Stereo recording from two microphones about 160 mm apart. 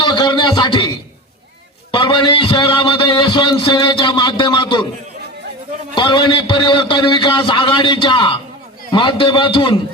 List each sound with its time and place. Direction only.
0.0 s a man's voice: 30° left (ahead or behind)
1.9 s a man's voice: 30° left (ahead or behind)
5.9 s a man's voice: 30° left (ahead or behind)